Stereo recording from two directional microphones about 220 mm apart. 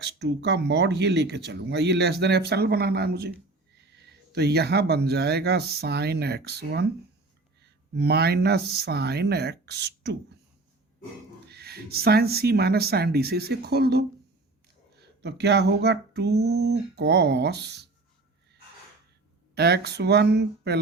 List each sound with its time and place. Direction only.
0.0 s speech: 50° right (ahead or behind)
11.4 s speech: 45° right (ahead or behind)
19.5 s speech: 50° right (ahead or behind)